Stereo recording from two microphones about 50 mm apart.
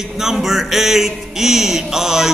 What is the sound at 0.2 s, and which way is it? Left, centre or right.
Speech, centre.